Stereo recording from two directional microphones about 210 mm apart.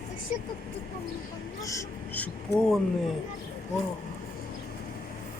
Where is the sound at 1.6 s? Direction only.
15° left (ahead or behind).